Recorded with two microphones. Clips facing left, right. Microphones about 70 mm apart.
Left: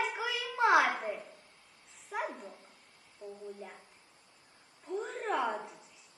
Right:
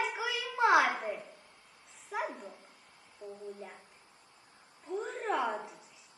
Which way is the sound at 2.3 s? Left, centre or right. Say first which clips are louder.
Even; centre.